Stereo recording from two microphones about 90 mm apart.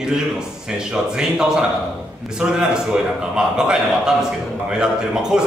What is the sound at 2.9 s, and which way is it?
A man's voice, 10° right (ahead or behind).